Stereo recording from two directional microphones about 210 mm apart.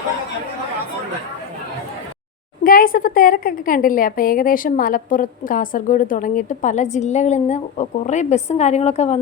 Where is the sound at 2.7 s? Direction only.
40° left (ahead or behind).